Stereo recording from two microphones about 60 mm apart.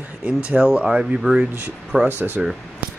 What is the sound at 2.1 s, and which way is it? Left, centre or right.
Speech, right.